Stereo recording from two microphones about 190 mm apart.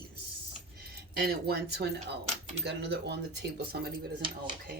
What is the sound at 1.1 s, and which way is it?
Speech, 55° right (ahead or behind).